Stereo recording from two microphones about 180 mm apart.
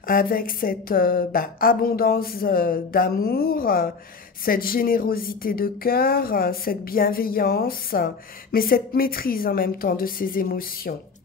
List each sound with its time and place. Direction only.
0.0 s speech: 55° left (ahead or behind)